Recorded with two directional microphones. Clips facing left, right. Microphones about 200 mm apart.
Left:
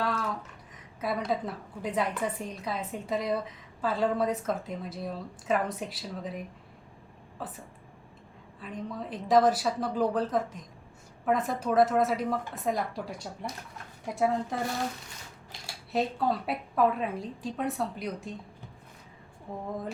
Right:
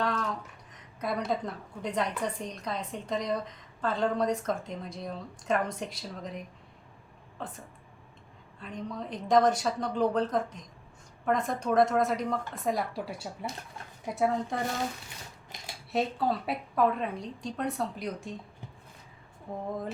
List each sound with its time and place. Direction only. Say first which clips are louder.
0.0 s a woman's voice: even; 5° left (ahead or behind)
15.9 s a woman's voice: left 1 dB; centre (ahead or behind)